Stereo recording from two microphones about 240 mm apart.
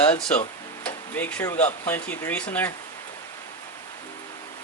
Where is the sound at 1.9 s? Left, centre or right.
Centre.